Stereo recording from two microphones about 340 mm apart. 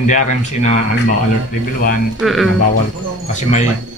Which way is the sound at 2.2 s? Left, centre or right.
Centre.